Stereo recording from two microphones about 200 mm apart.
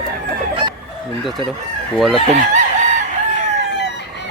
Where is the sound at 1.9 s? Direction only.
Centre (ahead or behind).